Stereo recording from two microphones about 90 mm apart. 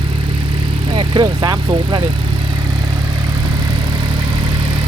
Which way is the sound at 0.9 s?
60° right (ahead or behind).